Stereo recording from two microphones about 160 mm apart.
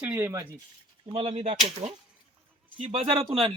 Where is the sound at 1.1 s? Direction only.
40° right (ahead or behind).